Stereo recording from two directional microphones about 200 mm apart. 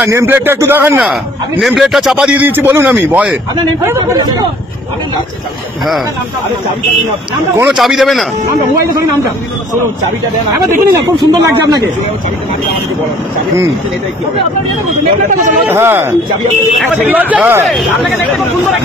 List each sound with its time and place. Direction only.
0.0 s a man's voice: 10° right (ahead or behind)
7.5 s a man's voice: 5° right (ahead or behind)
11.3 s speech: 20° right (ahead or behind)
15.2 s a man's voice: 40° right (ahead or behind)
15.6 s a man's voice: 10° right (ahead or behind)